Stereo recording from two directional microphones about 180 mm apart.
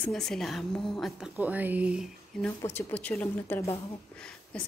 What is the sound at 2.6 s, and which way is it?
Speech, 10° left (ahead or behind).